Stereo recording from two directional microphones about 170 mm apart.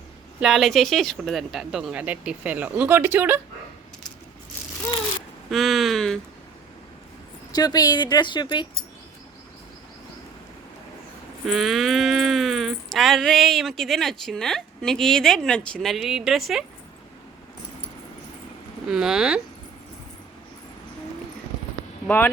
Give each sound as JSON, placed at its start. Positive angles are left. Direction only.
{"t": 0.3, "sound": "speech", "side_deg": 0}
{"t": 5.5, "sound": "speech", "side_deg": 0}
{"t": 7.5, "sound": "speech", "side_deg": 25}
{"t": 11.4, "sound": "speech", "side_deg": 0}
{"t": 18.9, "sound": "speech", "side_deg": 0}
{"t": 22.0, "sound": "speech", "side_deg": 10}